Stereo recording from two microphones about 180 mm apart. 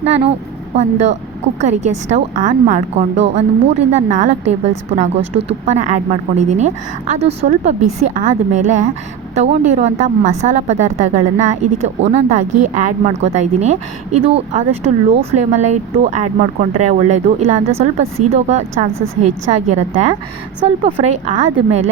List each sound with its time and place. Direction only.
0.8 s a woman's voice: 40° right (ahead or behind)